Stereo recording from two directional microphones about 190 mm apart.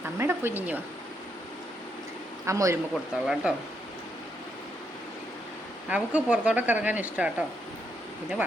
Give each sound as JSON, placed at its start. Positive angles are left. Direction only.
{"t": 0.2, "sound": "speech", "side_deg": -10}
{"t": 2.5, "sound": "speech", "side_deg": -15}
{"t": 2.9, "sound": "speech", "side_deg": -5}
{"t": 5.9, "sound": "speech", "side_deg": -5}